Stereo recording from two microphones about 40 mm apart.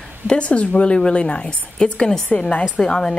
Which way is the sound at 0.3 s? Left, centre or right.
Left.